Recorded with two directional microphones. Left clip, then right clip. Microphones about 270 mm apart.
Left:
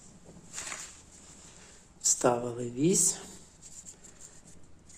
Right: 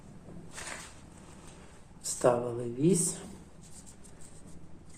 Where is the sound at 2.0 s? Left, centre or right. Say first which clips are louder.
Even; left.